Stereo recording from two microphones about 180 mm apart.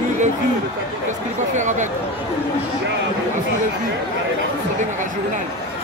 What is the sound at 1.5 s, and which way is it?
Speech, 40° right (ahead or behind).